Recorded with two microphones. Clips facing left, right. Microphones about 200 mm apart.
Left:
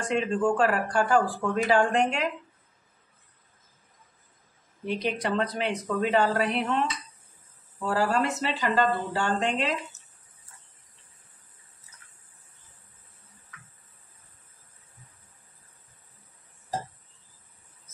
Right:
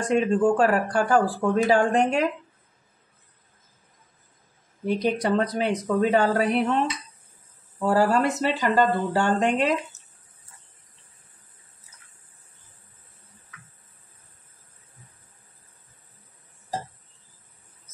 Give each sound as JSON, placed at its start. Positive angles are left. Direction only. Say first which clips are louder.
{"t": 0.0, "sound": "speech", "louder": "right 5 dB", "side_deg": -40}
{"t": 4.8, "sound": "speech", "louder": "right 5 dB", "side_deg": -40}
{"t": 7.8, "sound": "speech", "louder": "right 5 dB", "side_deg": -45}